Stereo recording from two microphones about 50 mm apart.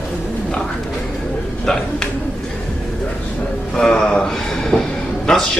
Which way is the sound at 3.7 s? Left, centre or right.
Centre.